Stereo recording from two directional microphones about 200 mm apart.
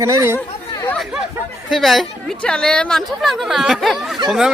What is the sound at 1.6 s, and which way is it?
A woman's voice, centre (ahead or behind).